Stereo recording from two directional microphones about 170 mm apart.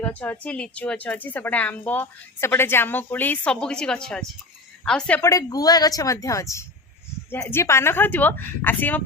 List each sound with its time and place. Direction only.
0.0 s a woman's voice: 10° left (ahead or behind)
5.3 s a woman's voice: 20° left (ahead or behind)